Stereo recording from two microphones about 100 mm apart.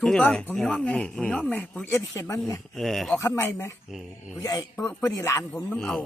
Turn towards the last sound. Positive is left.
turn(degrees=5)  # may be behind; listen again after turning